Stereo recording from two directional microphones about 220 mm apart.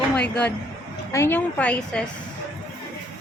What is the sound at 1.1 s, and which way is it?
Speech, 10° left (ahead or behind).